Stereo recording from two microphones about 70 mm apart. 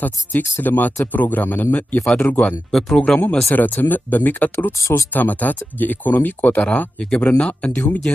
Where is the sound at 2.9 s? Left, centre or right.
Centre.